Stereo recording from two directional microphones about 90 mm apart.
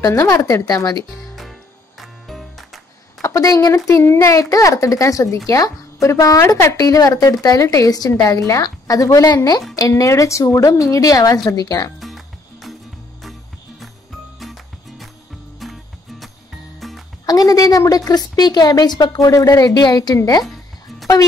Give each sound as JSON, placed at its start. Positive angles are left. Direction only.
{"t": 0.0, "sound": "a child's voice", "side_deg": 35}
{"t": 1.3, "sound": "music", "side_deg": 0}
{"t": 3.2, "sound": "a woman's voice", "side_deg": 35}
{"t": 4.0, "sound": "a child's voice", "side_deg": 30}
{"t": 13.2, "sound": "music", "side_deg": 0}
{"t": 17.3, "sound": "a woman's voice", "side_deg": 45}